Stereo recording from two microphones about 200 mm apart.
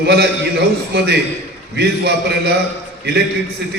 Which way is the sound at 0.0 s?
55° right (ahead or behind).